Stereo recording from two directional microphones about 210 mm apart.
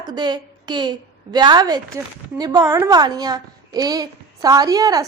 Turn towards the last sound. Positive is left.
turn(degrees=-15)  # may be behind; listen again after turning